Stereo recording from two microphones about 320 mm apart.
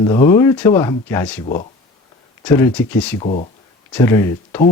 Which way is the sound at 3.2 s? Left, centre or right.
Left.